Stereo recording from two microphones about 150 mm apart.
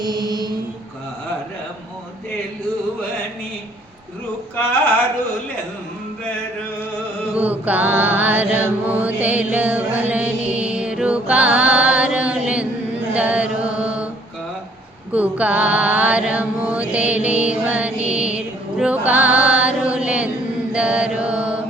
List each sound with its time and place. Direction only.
0.0 s mantra: 30° right (ahead or behind)
7.3 s mantra: 10° right (ahead or behind)
15.1 s mantra: 10° right (ahead or behind)
18.0 s music: 10° right (ahead or behind)
20.7 s mantra: 5° right (ahead or behind)